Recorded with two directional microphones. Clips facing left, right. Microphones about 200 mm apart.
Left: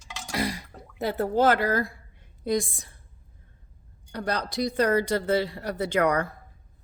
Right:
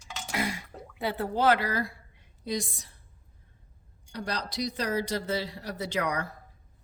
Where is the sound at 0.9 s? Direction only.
45° left (ahead or behind).